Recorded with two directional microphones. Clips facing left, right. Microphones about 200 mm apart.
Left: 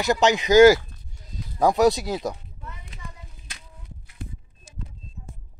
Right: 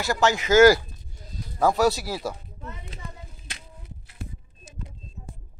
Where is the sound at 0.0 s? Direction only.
20° left (ahead or behind).